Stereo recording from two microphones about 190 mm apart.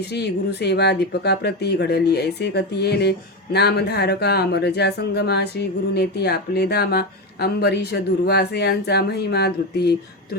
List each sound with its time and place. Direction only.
0.0 s speech: 60° left (ahead or behind)